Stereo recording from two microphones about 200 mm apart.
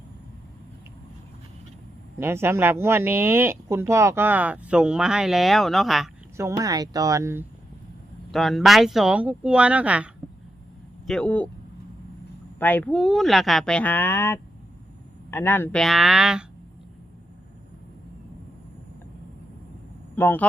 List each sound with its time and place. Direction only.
2.1 s speech: 10° right (ahead or behind)
6.3 s speech: 15° right (ahead or behind)
8.3 s speech: centre (ahead or behind)
11.0 s speech: 5° left (ahead or behind)
12.5 s speech: 10° left (ahead or behind)
20.1 s speech: 10° left (ahead or behind)